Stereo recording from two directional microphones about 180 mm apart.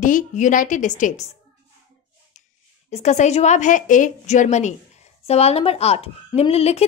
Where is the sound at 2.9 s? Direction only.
40° left (ahead or behind).